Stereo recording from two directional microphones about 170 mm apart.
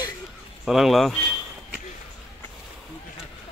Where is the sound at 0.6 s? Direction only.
Centre (ahead or behind).